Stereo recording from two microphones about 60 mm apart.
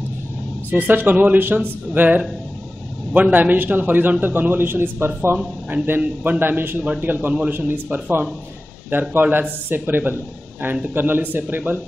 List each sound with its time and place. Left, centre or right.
0.7 s a man's voice: right
5.9 s a man's voice: right